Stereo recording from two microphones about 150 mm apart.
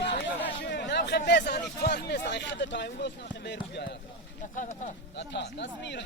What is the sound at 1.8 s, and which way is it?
Speech, 75° left (ahead or behind).